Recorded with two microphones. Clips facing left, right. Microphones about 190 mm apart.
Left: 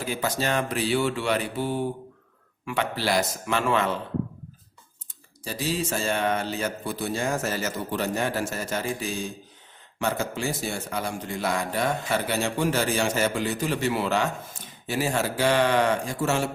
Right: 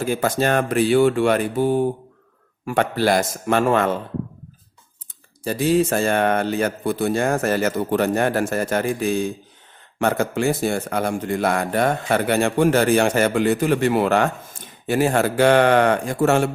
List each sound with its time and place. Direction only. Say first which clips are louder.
0.0 s speech: right 7 dB; 50° right (ahead or behind)
5.4 s a man's voice: right 10 dB; 55° right (ahead or behind)